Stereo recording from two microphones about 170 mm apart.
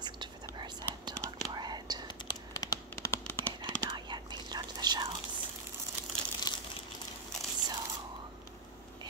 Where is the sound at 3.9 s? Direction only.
25° right (ahead or behind).